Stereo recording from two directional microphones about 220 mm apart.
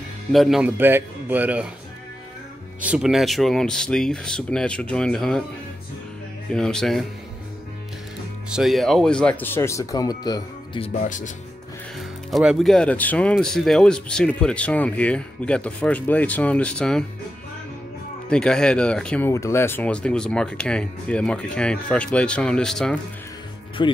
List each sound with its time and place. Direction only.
0.3 s speech: centre (ahead or behind)
2.8 s speech: 5° right (ahead or behind)
6.5 s speech: 5° left (ahead or behind)
8.5 s speech: centre (ahead or behind); by 10.9 s 20° left (ahead or behind)
10.9 s speech: 35° left (ahead or behind)
12.0 s speech: centre (ahead or behind)
18.3 s speech: 5° left (ahead or behind)
23.8 s speech: 20° left (ahead or behind)